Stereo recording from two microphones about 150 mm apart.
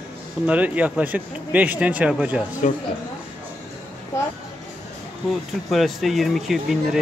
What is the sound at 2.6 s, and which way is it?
Speech, 55° left (ahead or behind).